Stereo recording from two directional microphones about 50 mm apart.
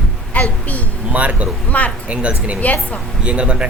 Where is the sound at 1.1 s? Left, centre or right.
Right.